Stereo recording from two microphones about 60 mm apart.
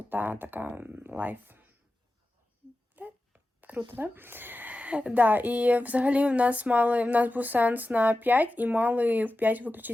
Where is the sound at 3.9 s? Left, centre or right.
Right.